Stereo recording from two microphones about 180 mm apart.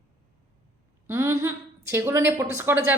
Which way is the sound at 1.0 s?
15° right (ahead or behind).